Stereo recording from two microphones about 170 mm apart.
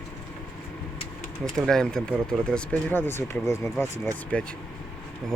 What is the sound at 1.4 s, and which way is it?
Speech, 5° left (ahead or behind).